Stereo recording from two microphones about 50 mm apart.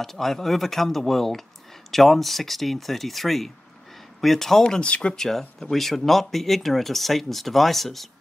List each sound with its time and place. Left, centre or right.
0.0 s speech: centre; by 5.2 s left
5.2 s speech: centre